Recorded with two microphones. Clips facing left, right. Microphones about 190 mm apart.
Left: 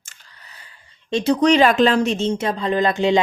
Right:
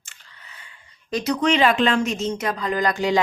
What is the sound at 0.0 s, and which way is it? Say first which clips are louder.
Speech: even; 40° left (ahead or behind).